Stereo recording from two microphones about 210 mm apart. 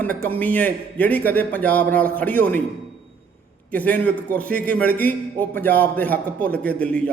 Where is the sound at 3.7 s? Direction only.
5° left (ahead or behind).